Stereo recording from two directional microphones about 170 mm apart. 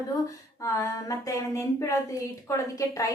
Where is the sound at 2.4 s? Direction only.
20° left (ahead or behind).